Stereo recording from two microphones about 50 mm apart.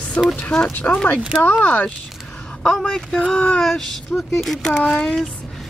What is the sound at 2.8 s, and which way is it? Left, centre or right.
Speech, centre.